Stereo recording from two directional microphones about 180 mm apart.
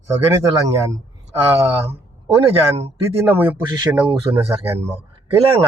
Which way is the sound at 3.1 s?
10° right (ahead or behind).